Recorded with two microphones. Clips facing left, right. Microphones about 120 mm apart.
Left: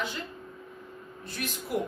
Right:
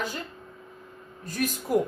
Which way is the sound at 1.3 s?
40° right (ahead or behind).